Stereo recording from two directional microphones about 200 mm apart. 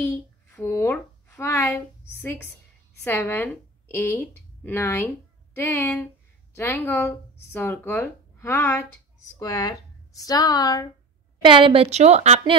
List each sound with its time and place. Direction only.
0.1 s a sound: 15° left (ahead or behind)
3.0 s a woman's voice: 10° left (ahead or behind)
11.4 s a woman's voice: 25° right (ahead or behind)